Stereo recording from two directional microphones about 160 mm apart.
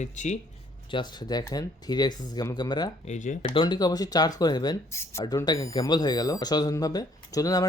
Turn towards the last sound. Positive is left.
turn(degrees=20)  # may be behind; listen again after turning